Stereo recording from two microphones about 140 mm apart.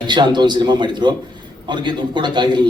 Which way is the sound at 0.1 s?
30° right (ahead or behind).